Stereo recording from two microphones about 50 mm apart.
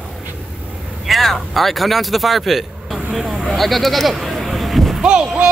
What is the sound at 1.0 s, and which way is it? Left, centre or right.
Speech, centre.